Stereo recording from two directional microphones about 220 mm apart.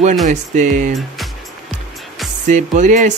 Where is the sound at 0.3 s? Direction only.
35° right (ahead or behind).